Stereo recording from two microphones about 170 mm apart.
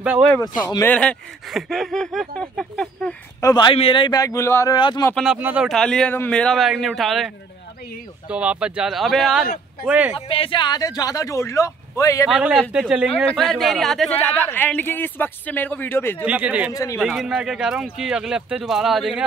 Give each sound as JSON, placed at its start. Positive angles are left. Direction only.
{"t": 0.0, "sound": "speech", "side_deg": -5}
{"t": 0.4, "sound": "speech", "side_deg": 20}
{"t": 0.9, "sound": "speech", "side_deg": 5}
{"t": 3.3, "sound": "speech", "side_deg": 20}
{"t": 4.7, "sound": "speech", "side_deg": 25}
{"t": 5.1, "sound": "speech", "side_deg": -5}
{"t": 8.3, "sound": "speech", "side_deg": -5}
{"t": 10.1, "sound": "speech", "side_deg": 30}
{"t": 12.3, "sound": "speech", "side_deg": -5}
{"t": 16.3, "sound": "speech", "side_deg": -10}
{"t": 16.7, "sound": "speech", "side_deg": 20}
{"t": 17.0, "sound": "speech", "side_deg": -5}